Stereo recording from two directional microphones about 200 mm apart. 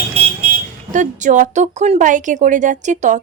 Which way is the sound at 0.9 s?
40° right (ahead or behind).